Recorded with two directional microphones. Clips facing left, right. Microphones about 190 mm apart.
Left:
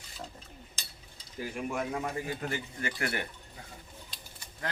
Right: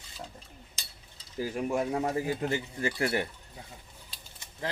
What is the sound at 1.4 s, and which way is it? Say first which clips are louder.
A man's voice: right 5 dB; 30° right (ahead or behind).